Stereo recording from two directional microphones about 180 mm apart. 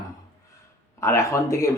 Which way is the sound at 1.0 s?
15° left (ahead or behind).